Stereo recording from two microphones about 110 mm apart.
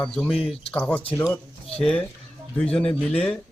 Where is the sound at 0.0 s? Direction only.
5° left (ahead or behind).